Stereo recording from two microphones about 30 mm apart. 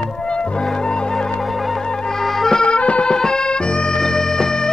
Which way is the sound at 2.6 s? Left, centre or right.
Left.